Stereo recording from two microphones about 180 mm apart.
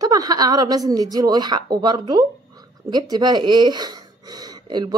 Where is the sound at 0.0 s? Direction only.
20° right (ahead or behind).